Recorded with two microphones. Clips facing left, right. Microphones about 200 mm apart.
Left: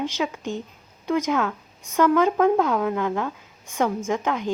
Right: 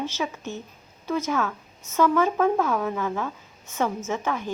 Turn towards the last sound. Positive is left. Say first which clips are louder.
# left 3 dB
turn(degrees=15)  # may be behind; listen again after turning